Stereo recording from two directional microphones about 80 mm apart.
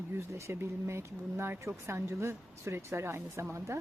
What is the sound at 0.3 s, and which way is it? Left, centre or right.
Speech, right.